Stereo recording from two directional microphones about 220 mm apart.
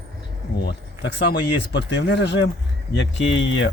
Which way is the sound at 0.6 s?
50° left (ahead or behind).